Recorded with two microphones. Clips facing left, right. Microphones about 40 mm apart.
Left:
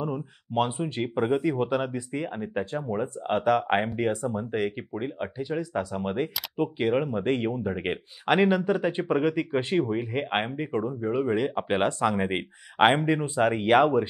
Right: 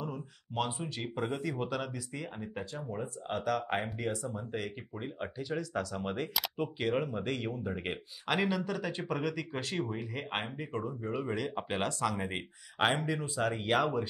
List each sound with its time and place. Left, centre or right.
0.0 s speech: left
5.0 s speech: centre
7.2 s speech: left